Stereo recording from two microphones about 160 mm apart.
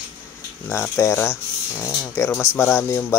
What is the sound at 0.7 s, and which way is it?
Mantra, 15° left (ahead or behind).